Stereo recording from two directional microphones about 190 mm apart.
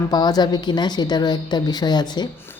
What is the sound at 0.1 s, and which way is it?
A woman's voice, 20° left (ahead or behind).